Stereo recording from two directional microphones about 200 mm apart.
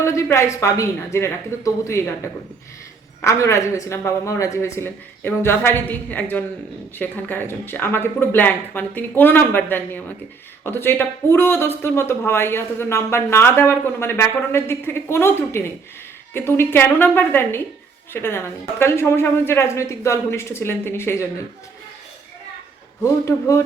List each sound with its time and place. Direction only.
0.0 s speech: 15° left (ahead or behind)
23.0 s speech: 15° left (ahead or behind)